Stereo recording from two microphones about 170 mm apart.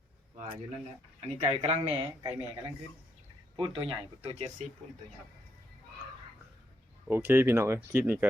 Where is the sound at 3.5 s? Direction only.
30° right (ahead or behind).